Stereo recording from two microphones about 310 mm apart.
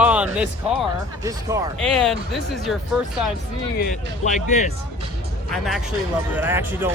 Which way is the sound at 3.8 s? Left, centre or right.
Left.